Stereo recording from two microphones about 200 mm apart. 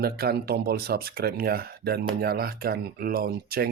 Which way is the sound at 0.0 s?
50° right (ahead or behind).